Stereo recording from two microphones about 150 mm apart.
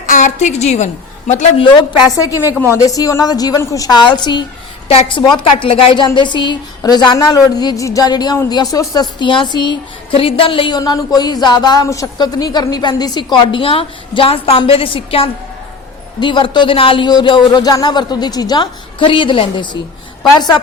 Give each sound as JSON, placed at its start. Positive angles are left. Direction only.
{"t": 0.0, "sound": "a woman's voice", "side_deg": 60}
{"t": 1.6, "sound": "speech", "side_deg": 25}